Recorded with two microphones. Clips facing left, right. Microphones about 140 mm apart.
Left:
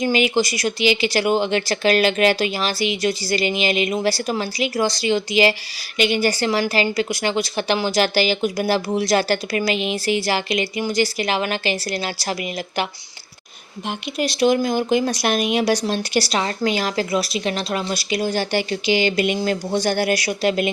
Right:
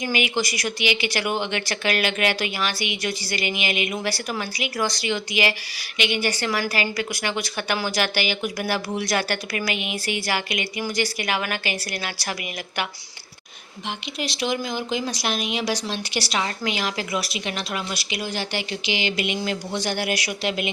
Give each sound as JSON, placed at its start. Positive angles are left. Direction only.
{"t": 0.0, "sound": "a woman's voice", "side_deg": 30}
{"t": 13.8, "sound": "speech", "side_deg": 45}